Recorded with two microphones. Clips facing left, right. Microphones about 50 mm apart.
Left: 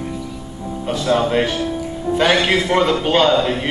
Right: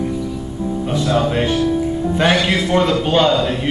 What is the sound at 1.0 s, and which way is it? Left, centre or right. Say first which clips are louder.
Music: left 2 dB; centre.